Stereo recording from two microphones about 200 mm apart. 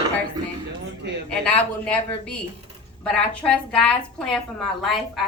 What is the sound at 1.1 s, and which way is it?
Speech, 60° right (ahead or behind).